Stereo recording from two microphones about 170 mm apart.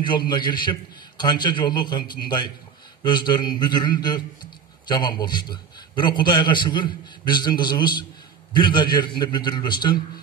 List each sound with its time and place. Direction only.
0.3 s a man's voice: 25° left (ahead or behind)